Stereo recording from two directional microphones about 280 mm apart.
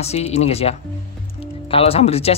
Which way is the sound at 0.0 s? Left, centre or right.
Left.